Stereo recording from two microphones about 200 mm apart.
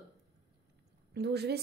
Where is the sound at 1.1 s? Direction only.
55° right (ahead or behind).